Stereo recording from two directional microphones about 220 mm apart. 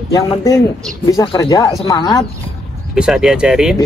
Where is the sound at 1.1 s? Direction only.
15° left (ahead or behind).